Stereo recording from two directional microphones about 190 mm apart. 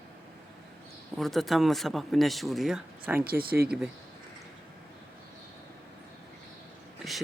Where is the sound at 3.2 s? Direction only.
50° right (ahead or behind).